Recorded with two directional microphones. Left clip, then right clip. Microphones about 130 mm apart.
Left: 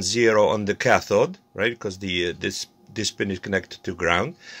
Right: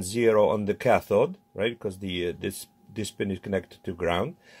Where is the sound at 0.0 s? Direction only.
10° right (ahead or behind).